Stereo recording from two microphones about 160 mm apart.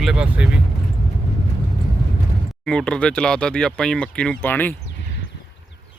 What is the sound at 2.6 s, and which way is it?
Speech, 5° left (ahead or behind).